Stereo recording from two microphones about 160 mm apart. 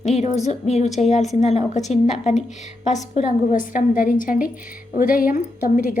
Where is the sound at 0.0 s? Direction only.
45° left (ahead or behind).